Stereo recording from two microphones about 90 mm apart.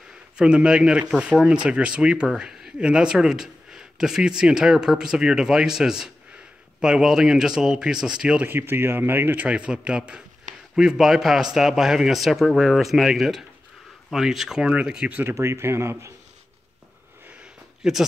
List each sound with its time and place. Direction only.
0.4 s speech: 10° right (ahead or behind)
8.5 s a man's voice: 25° right (ahead or behind)
15.2 s a man's voice: 30° right (ahead or behind)
17.3 s a sound: 10° right (ahead or behind)